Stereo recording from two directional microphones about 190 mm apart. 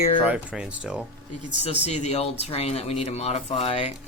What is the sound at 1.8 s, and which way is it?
Speech, 35° left (ahead or behind).